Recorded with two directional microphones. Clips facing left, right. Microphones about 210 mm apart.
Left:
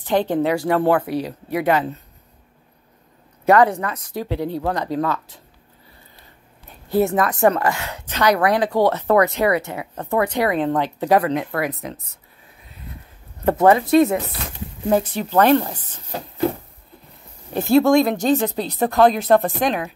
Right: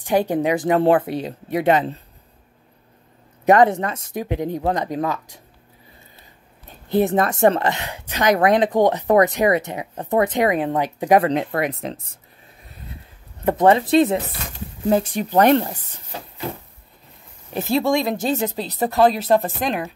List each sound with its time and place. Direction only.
0.0 s a woman's voice: 10° right (ahead or behind)
3.4 s a woman's voice: 25° right (ahead or behind)
7.1 s a woman's voice: 25° right (ahead or behind)
11.1 s a woman's voice: 30° right (ahead or behind)
13.5 s a woman's voice: 20° right (ahead or behind)
15.1 s speech: 15° right (ahead or behind)
17.6 s speech: centre (ahead or behind)